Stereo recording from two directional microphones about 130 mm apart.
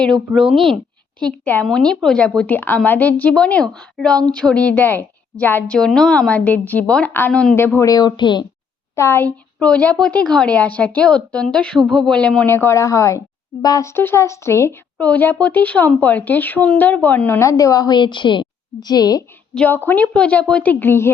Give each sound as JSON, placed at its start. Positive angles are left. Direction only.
{"t": 0.0, "sound": "speech", "side_deg": 5}
{"t": 1.2, "sound": "speech", "side_deg": 15}
{"t": 7.9, "sound": "speech", "side_deg": 30}
{"t": 9.0, "sound": "speech", "side_deg": 20}
{"t": 12.5, "sound": "speech", "side_deg": 20}
{"t": 19.5, "sound": "speech", "side_deg": 15}